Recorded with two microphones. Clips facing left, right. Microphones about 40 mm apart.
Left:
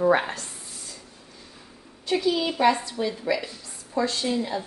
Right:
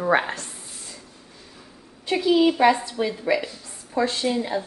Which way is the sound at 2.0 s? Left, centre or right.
Right.